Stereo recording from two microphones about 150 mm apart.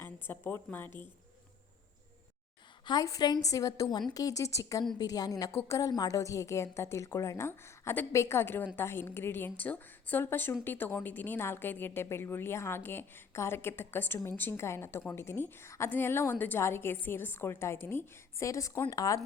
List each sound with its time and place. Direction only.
0.0 s a woman's voice: 15° left (ahead or behind)
2.8 s a woman's voice: 25° left (ahead or behind)